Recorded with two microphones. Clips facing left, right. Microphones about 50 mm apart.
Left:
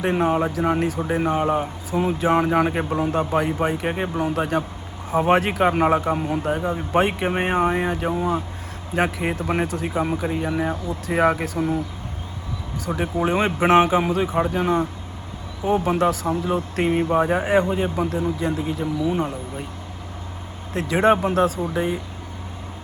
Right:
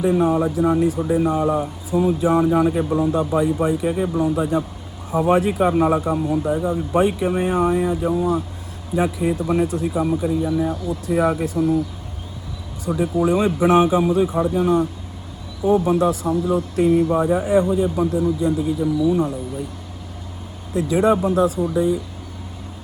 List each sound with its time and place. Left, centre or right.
0.0 s speech: left
9.0 s speech: left
13.1 s speech: left
20.7 s speech: left